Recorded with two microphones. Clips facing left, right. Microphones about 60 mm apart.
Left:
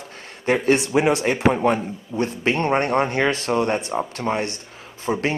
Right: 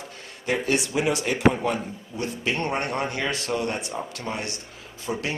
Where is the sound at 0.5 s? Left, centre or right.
Left.